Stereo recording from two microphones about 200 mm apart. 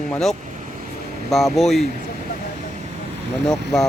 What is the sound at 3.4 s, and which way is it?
Music, centre (ahead or behind).